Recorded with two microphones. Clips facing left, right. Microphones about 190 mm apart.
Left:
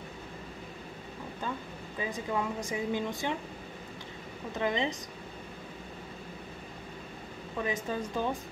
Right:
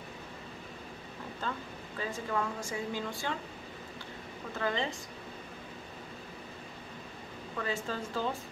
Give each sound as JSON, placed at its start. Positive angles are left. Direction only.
{"t": 2.0, "sound": "speech", "side_deg": 15}
{"t": 4.6, "sound": "speech", "side_deg": 20}
{"t": 7.5, "sound": "speech", "side_deg": 15}